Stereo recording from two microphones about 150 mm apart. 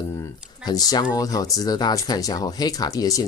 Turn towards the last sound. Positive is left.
turn(degrees=25)  # may be behind; listen again after turning